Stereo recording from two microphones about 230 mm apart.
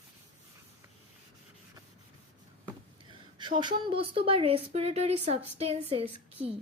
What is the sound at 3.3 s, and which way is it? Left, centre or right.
A woman's voice, centre.